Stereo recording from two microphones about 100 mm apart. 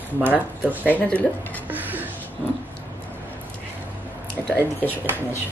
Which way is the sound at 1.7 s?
15° right (ahead or behind).